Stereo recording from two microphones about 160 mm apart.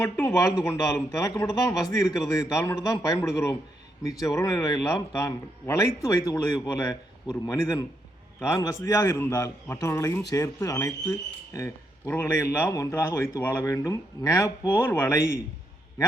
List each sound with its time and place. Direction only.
0.0 s a man's voice: 15° left (ahead or behind)